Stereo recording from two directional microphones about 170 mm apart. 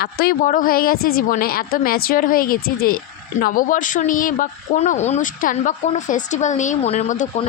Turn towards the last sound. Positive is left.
turn(degrees=45)  # may be behind; listen again after turning